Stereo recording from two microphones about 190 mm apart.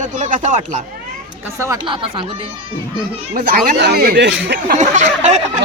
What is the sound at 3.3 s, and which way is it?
Speech, 50° right (ahead or behind).